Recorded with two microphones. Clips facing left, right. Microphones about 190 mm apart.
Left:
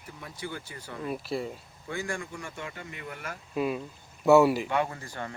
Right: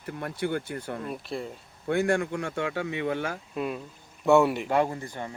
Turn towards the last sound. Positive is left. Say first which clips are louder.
# right 2 dB
turn(degrees=-15)  # may be behind; listen again after turning